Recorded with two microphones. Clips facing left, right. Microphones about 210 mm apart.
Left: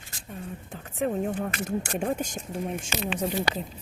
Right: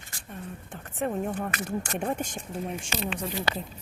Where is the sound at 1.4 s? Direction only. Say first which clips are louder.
Left 2 dB; 40° left (ahead or behind).